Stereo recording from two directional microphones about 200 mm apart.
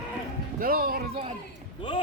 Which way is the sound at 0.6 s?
50° right (ahead or behind).